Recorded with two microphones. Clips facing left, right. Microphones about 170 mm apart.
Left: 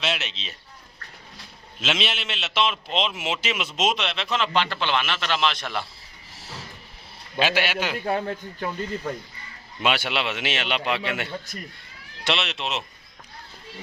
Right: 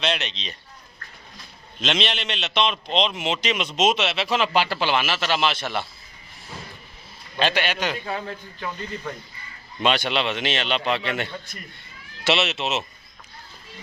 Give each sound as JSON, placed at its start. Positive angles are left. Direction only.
{"t": 0.0, "sound": "a man's voice", "side_deg": 5}
{"t": 1.8, "sound": "a man's voice", "side_deg": 5}
{"t": 7.3, "sound": "a man's voice", "side_deg": 5}
{"t": 8.0, "sound": "a man's voice", "side_deg": 50}
{"t": 9.8, "sound": "a man's voice", "side_deg": 10}
{"t": 12.2, "sound": "a man's voice", "side_deg": -5}